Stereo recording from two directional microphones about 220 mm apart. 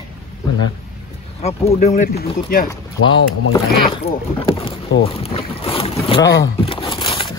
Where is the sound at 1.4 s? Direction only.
30° left (ahead or behind).